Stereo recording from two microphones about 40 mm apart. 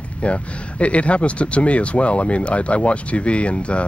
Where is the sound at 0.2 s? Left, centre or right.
Left.